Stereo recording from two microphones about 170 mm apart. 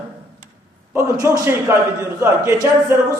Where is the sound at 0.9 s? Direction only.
20° right (ahead or behind).